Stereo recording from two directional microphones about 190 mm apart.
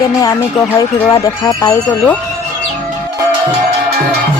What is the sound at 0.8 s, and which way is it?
Speech, 15° left (ahead or behind).